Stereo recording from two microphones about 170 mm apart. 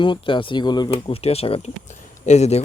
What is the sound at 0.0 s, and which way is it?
Speech, 30° left (ahead or behind).